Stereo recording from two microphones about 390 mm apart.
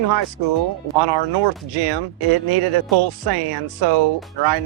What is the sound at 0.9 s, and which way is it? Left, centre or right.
Speech, right.